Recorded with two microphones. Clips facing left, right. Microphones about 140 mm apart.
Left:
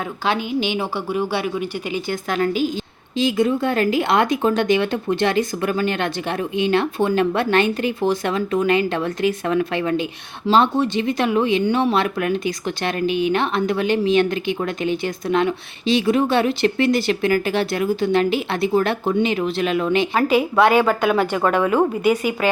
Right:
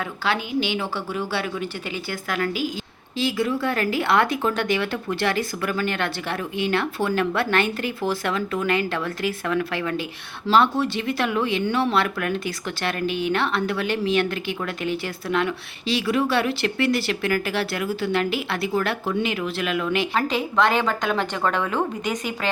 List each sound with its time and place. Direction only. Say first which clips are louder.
0.3 s a woman's voice: left 3 dB; 20° left (ahead or behind)
20.1 s a woman's voice: left 6 dB; 10° left (ahead or behind)